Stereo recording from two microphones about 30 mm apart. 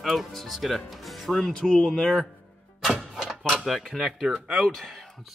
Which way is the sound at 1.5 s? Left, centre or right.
Left.